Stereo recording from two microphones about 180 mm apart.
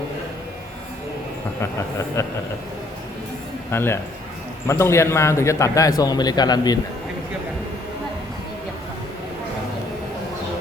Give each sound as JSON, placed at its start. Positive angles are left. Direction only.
{"t": 2.2, "sound": "a man's voice", "side_deg": 15}
{"t": 3.7, "sound": "a man's voice", "side_deg": 15}